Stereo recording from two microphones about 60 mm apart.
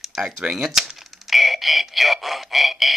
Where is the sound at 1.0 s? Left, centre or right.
Centre.